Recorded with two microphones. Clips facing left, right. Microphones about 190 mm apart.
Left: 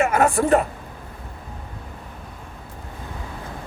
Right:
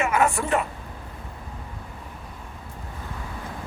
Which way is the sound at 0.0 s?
35° left (ahead or behind).